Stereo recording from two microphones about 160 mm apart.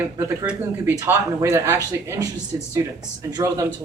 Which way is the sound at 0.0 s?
15° right (ahead or behind).